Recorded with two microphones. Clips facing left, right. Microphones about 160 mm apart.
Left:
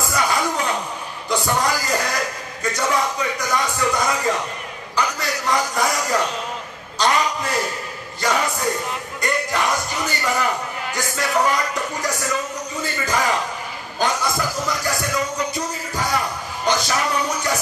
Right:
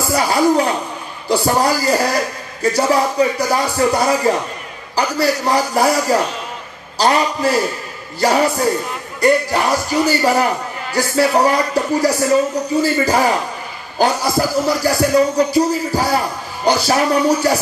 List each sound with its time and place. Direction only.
0.1 s speech: 35° right (ahead or behind)